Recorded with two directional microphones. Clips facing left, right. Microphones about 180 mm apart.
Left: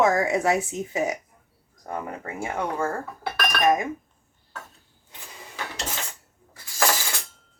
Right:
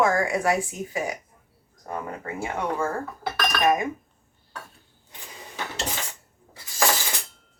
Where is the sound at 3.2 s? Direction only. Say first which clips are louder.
Left 1 dB; centre (ahead or behind).